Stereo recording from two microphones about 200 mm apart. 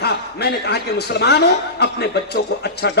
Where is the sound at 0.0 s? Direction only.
55° left (ahead or behind).